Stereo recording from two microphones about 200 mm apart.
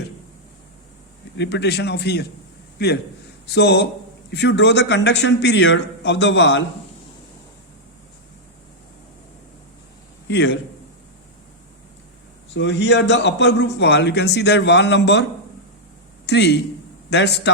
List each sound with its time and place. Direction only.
1.4 s a man's voice: 60° left (ahead or behind)
10.2 s a man's voice: 60° left (ahead or behind)
12.5 s a man's voice: 60° left (ahead or behind)